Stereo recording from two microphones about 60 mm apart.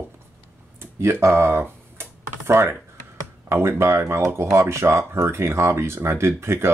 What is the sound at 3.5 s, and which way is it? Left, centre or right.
Speech, right.